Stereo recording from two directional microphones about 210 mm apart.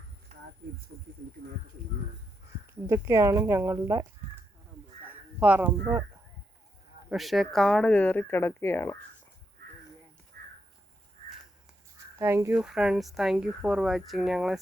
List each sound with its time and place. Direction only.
0.3 s a sound: 30° right (ahead or behind)
0.9 s speech: 70° right (ahead or behind)
2.8 s speech: 15° right (ahead or behind)
5.4 s speech: 5° right (ahead or behind)
7.1 s speech: centre (ahead or behind)
10.3 s cricket: 45° right (ahead or behind)
12.2 s speech: 10° right (ahead or behind)